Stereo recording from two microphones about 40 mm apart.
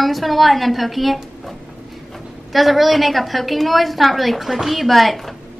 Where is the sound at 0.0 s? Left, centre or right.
Centre.